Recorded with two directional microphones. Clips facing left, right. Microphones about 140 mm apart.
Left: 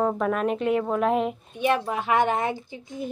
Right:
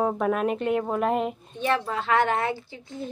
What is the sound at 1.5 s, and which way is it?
Speech, 15° left (ahead or behind).